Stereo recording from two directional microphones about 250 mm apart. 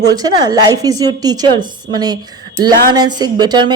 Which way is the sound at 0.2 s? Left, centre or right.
Centre.